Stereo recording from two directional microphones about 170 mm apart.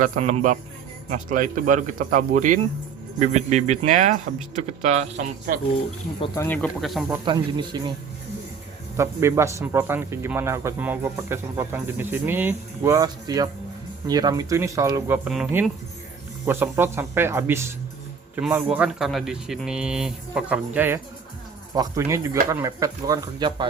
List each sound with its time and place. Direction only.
0.2 s a man's voice: 40° right (ahead or behind)
6.3 s speech: 20° left (ahead or behind)
6.6 s speech: centre (ahead or behind)
7.3 s speech: 25° right (ahead or behind)
9.0 s a man's voice: 15° right (ahead or behind)
16.5 s a man's voice: 15° right (ahead or behind)